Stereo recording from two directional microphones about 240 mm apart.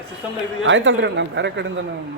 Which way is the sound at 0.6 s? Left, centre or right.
Right.